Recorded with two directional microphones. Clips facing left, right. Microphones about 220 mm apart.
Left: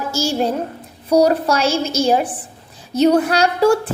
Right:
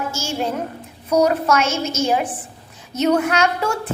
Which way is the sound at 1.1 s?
35° left (ahead or behind).